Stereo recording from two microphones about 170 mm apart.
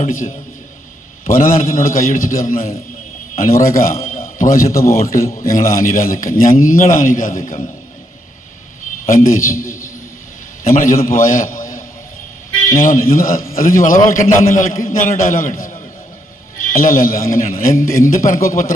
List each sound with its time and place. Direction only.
0.1 s a man's voice: 50° left (ahead or behind)
9.0 s a man's voice: 55° left (ahead or behind)
12.8 s a man's voice: 55° left (ahead or behind)